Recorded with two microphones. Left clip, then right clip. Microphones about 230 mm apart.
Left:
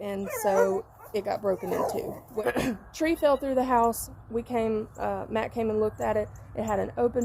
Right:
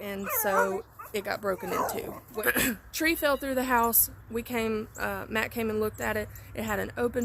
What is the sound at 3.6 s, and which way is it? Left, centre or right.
Speech, right.